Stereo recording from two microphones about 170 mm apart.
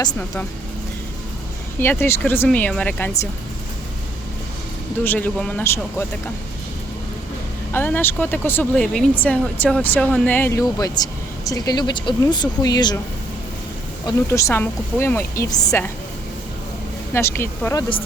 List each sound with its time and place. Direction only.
1.8 s speech: 15° left (ahead or behind)
5.0 s speech: 10° left (ahead or behind)
7.7 s speech: 10° left (ahead or behind)
14.3 s speech: 15° left (ahead or behind)
17.2 s speech: 15° left (ahead or behind)